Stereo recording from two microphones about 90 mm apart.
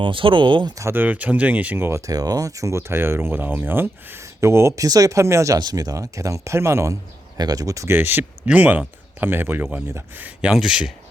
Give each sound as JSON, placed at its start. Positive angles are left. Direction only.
{"t": 0.0, "sound": "speech", "side_deg": -70}
{"t": 0.9, "sound": "speech", "side_deg": -15}
{"t": 1.9, "sound": "speech", "side_deg": -40}
{"t": 5.5, "sound": "speech", "side_deg": -45}
{"t": 7.3, "sound": "speech", "side_deg": -45}
{"t": 7.9, "sound": "speech", "side_deg": -25}
{"t": 10.5, "sound": "speech", "side_deg": -5}